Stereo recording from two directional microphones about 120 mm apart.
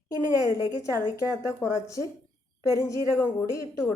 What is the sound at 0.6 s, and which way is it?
A woman's voice, 25° left (ahead or behind).